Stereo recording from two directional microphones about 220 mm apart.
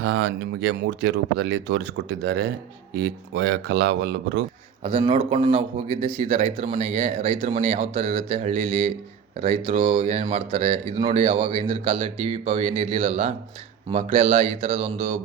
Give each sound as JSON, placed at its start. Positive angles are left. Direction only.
{"t": 0.0, "sound": "speech", "side_deg": -55}
{"t": 4.8, "sound": "speech", "side_deg": -25}